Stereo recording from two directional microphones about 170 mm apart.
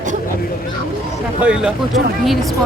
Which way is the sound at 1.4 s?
5° right (ahead or behind).